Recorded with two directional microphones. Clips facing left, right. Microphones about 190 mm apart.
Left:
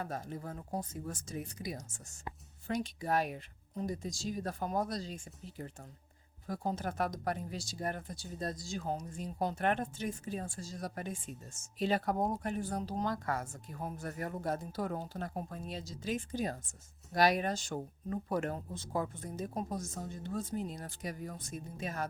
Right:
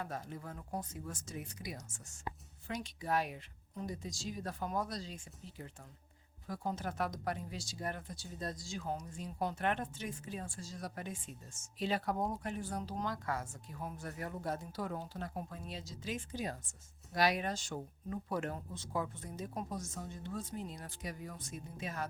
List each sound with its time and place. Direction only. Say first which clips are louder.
0.0 s speech: left 3 dB; 40° left (ahead or behind)